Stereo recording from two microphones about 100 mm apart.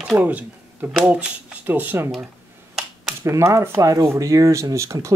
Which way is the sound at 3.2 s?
30° right (ahead or behind).